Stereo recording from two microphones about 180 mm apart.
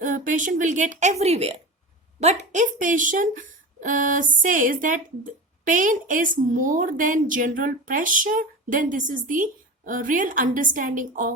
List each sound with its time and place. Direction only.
0.0 s speech: 45° right (ahead or behind)